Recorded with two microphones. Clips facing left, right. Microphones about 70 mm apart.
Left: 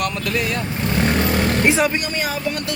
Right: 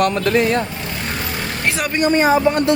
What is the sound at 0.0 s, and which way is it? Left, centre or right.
Speech, right.